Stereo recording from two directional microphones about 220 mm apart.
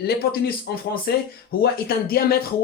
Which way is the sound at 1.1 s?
45° left (ahead or behind).